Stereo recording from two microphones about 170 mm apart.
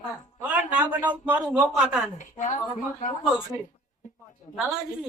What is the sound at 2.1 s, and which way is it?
Speech, 45° left (ahead or behind).